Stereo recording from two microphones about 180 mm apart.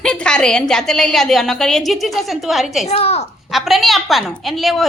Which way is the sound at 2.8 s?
35° left (ahead or behind).